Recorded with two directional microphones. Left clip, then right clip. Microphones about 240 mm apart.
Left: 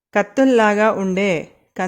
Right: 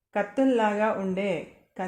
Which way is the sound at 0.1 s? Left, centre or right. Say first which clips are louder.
Left 9 dB; left.